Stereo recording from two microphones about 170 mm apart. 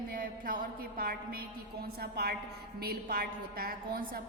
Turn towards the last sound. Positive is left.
turn(degrees=-60)  # may be behind; listen again after turning